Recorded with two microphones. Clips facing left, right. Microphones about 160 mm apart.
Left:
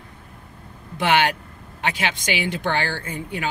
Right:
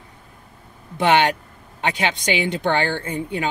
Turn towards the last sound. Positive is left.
turn(degrees=-30)  # may be behind; listen again after turning